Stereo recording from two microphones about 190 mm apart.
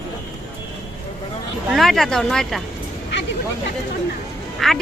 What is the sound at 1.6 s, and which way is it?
Speech, centre (ahead or behind).